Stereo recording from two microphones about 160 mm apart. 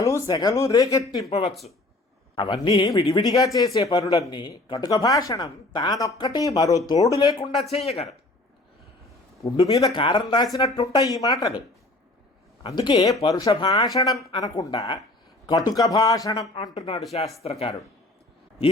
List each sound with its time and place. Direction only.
0.0 s speech: 20° left (ahead or behind)
1.5 s speech: centre (ahead or behind)
2.3 s speech: 25° left (ahead or behind)
7.5 s speech: 40° left (ahead or behind)
9.6 s speech: 30° left (ahead or behind)
12.6 s speech: 30° left (ahead or behind)
16.7 s speech: 35° left (ahead or behind)